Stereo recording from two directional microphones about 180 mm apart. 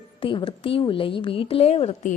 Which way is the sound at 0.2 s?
30° left (ahead or behind).